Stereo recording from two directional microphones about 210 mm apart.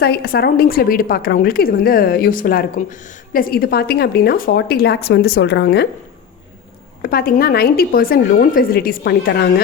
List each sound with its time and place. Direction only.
0.0 s a woman's voice: 50° left (ahead or behind)
7.0 s a woman's voice: 45° left (ahead or behind)